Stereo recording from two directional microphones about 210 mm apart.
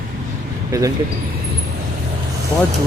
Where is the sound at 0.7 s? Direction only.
15° right (ahead or behind).